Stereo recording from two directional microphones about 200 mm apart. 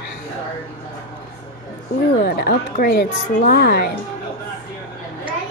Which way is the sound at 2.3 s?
50° left (ahead or behind).